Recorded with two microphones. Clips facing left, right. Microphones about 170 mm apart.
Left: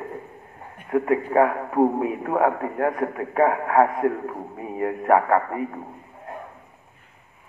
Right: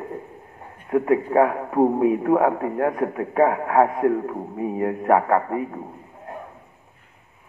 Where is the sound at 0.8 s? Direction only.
20° right (ahead or behind).